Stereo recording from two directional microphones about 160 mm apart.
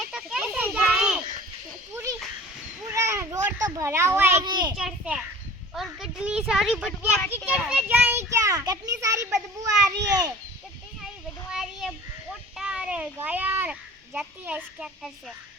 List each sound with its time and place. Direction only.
0.0 s children playing: 5° right (ahead or behind)
2.9 s children playing: 20° right (ahead or behind)
4.4 s a child's voice: 25° right (ahead or behind)
4.8 s a child's voice: 5° right (ahead or behind); by 10.3 s 25° right (ahead or behind)
11.5 s child singing: 5° right (ahead or behind)
12.5 s a child's voice: 5° right (ahead or behind)